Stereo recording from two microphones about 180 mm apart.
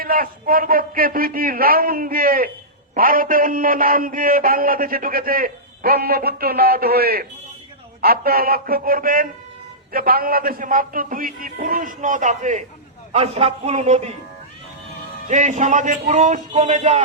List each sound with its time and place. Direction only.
0.0 s a man's voice: 55° right (ahead or behind)
15.3 s a man's voice: 40° right (ahead or behind)